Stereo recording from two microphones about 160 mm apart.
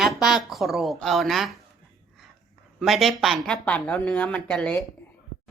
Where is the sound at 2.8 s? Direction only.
Centre (ahead or behind).